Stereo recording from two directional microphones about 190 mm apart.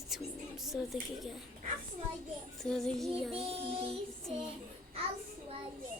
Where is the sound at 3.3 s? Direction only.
30° right (ahead or behind).